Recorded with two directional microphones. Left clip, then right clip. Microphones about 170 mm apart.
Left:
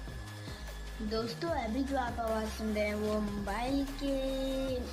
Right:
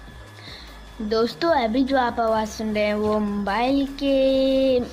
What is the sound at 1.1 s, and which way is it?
A woman's voice, 60° right (ahead or behind).